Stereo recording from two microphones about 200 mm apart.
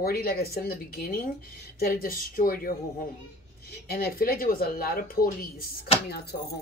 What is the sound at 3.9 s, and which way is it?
Speech, 50° left (ahead or behind).